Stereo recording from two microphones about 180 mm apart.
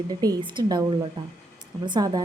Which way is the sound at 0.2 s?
25° right (ahead or behind).